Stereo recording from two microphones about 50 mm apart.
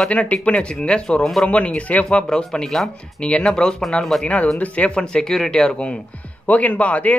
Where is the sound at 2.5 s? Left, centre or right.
Centre.